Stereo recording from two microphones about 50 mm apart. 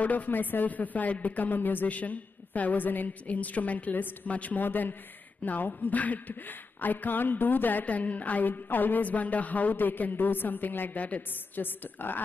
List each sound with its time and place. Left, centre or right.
0.0 s a woman's voice: left